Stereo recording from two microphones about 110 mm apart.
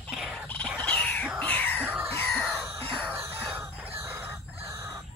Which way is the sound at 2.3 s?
5° left (ahead or behind).